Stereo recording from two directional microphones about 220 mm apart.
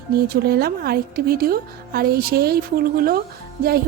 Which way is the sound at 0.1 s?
45° right (ahead or behind).